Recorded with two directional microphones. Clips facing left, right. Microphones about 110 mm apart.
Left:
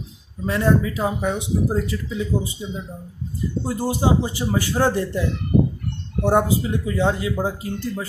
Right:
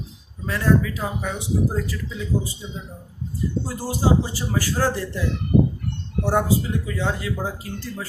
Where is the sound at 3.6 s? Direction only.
20° left (ahead or behind).